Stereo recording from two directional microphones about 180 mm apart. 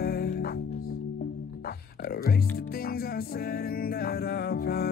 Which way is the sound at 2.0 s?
55° left (ahead or behind).